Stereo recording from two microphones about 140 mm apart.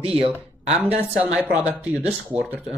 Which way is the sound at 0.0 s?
45° right (ahead or behind).